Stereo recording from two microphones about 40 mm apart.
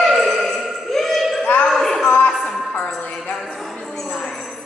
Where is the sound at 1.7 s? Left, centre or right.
Centre.